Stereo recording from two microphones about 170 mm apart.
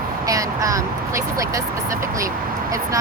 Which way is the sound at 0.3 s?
20° right (ahead or behind).